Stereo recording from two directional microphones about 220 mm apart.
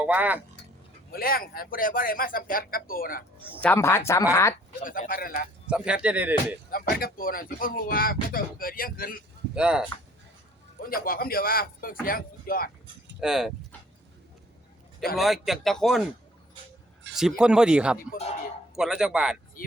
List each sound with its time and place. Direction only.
0.0 s speech: 5° right (ahead or behind)
1.1 s speech: 40° left (ahead or behind)
3.6 s speech: 10° left (ahead or behind)
4.8 s speech: 40° left (ahead or behind)
5.6 s speech: 5° right (ahead or behind)
6.7 s speech: 40° left (ahead or behind)
9.6 s speech: 5° right (ahead or behind)
10.8 s speech: 40° left (ahead or behind)
13.1 s speech: centre (ahead or behind)
15.1 s speech: centre (ahead or behind)
17.2 s speech: 5° right (ahead or behind)